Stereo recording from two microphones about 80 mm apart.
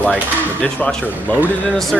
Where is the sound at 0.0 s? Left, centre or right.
Centre.